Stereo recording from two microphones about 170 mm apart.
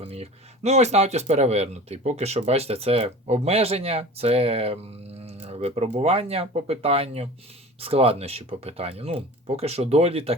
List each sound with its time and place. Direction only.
0.0 s speech: 35° right (ahead or behind)
5.2 s a sound: 35° right (ahead or behind)
6.0 s speech: 35° right (ahead or behind)